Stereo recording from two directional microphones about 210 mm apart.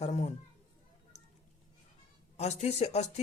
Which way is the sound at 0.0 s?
30° left (ahead or behind).